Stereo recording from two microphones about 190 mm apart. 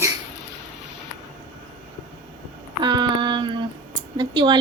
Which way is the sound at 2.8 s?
25° right (ahead or behind).